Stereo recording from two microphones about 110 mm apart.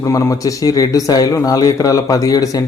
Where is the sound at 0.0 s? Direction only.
30° left (ahead or behind).